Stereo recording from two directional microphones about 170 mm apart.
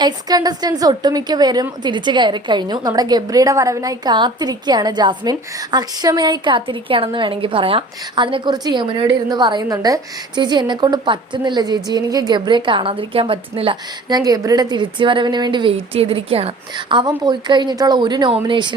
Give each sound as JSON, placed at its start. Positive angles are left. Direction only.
{"t": 0.0, "sound": "a woman's voice", "side_deg": -20}